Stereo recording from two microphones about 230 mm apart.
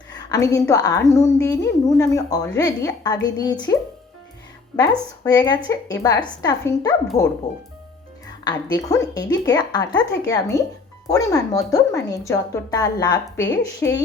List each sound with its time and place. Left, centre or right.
0.1 s a sound: centre
0.7 s a woman's voice: centre
4.8 s a woman's voice: centre
8.7 s a woman's voice: centre